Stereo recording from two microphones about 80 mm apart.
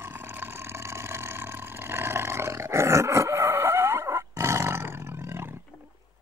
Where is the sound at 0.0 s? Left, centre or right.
Right.